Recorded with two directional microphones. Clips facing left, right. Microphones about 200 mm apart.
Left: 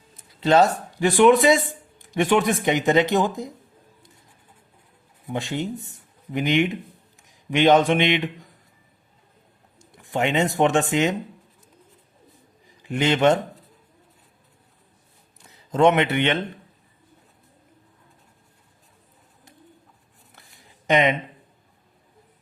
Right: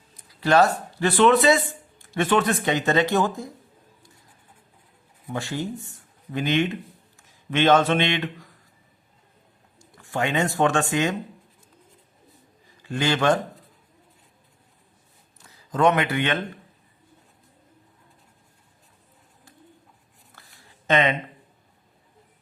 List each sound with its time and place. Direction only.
0.2 s speech: 20° left (ahead or behind)
5.3 s a man's voice: 20° left (ahead or behind)
10.0 s a man's voice: 20° left (ahead or behind)
12.8 s a man's voice: 20° left (ahead or behind)
15.4 s speech: 25° left (ahead or behind)
20.3 s a sound: 15° left (ahead or behind)